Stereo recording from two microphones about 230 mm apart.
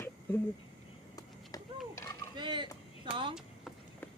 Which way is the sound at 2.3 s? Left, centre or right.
Centre.